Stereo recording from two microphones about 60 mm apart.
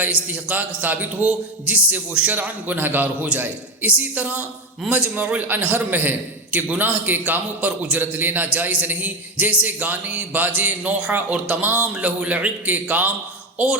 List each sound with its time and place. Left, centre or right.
0.0 s a man's voice: right